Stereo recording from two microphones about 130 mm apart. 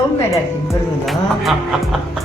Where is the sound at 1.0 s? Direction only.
Centre (ahead or behind).